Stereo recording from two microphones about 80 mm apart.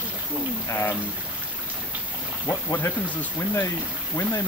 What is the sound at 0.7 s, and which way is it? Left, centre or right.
Speech, left.